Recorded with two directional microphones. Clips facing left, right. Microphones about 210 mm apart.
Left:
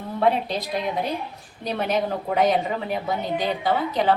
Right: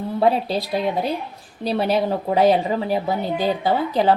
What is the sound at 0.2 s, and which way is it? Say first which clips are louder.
A woman's voice: right 2 dB; 35° right (ahead or behind).